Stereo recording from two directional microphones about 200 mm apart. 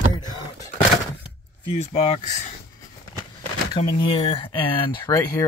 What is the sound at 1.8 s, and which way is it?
Speech, 30° left (ahead or behind).